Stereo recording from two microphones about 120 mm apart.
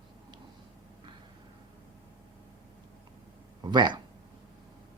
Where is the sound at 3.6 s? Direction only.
35° right (ahead or behind).